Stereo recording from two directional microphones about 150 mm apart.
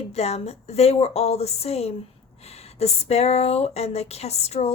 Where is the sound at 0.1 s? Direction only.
45° left (ahead or behind).